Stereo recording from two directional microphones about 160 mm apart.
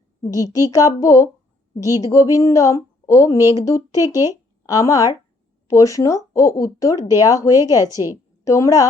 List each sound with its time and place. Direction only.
0.2 s a woman's voice: 20° left (ahead or behind)
7.9 s a woman's voice: 15° right (ahead or behind)
8.4 s a woman's voice: 20° left (ahead or behind)